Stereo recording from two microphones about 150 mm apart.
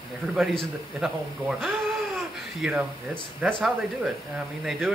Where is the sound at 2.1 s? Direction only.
5° right (ahead or behind).